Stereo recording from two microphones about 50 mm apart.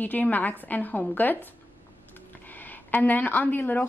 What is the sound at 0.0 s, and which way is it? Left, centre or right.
A woman's voice, left.